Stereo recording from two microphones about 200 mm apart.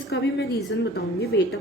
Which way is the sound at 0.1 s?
55° left (ahead or behind).